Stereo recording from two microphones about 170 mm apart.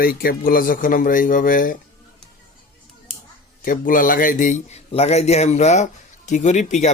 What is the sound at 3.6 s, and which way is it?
A man's voice, 55° left (ahead or behind).